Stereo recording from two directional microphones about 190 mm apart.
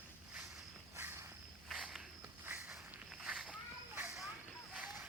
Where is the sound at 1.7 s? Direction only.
5° right (ahead or behind).